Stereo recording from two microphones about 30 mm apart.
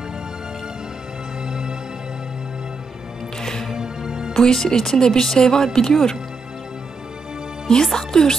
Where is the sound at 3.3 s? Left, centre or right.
Centre.